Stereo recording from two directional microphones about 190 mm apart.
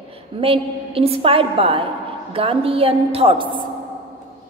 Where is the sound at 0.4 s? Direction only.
30° right (ahead or behind).